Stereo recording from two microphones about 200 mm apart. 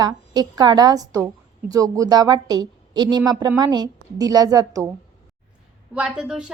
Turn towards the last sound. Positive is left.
turn(degrees=-5)  # may be behind; listen again after turning